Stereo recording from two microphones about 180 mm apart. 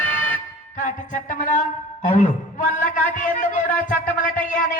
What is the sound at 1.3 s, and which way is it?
A man's voice, 45° left (ahead or behind).